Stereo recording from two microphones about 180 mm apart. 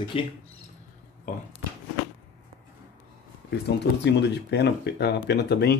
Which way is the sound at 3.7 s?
65° left (ahead or behind).